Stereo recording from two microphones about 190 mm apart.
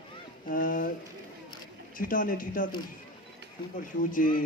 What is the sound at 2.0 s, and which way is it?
Speech, 45° left (ahead or behind).